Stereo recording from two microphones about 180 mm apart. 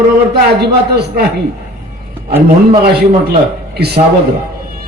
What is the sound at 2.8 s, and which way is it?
A man's voice, 60° right (ahead or behind).